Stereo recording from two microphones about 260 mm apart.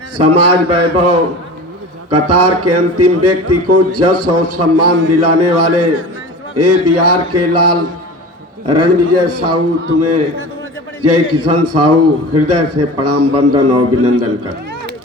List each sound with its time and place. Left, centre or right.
0.2 s a man's voice: right
11.0 s a man's voice: right